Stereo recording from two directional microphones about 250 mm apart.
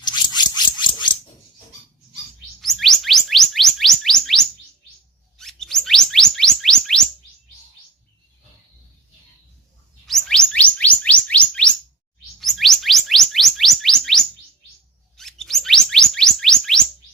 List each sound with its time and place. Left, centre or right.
0.0 s a sound: centre
2.6 s chirp tone: centre
10.1 s chirp tone: centre